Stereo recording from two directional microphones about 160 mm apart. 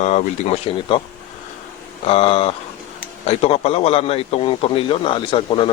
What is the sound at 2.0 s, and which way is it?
A man's voice, 40° left (ahead or behind).